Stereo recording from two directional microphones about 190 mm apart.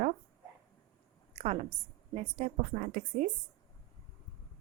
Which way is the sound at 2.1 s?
40° right (ahead or behind).